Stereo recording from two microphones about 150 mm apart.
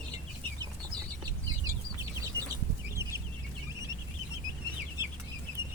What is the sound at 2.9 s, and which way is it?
Chicken, 20° right (ahead or behind).